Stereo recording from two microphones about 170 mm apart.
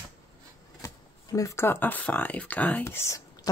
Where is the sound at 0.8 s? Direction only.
20° left (ahead or behind).